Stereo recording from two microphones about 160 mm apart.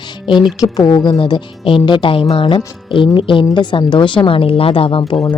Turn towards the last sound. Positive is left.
turn(degrees=35)  # may be behind; listen again after turning